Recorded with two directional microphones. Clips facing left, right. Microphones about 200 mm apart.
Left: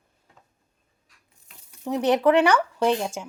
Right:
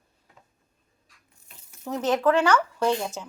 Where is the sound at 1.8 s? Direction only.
15° left (ahead or behind).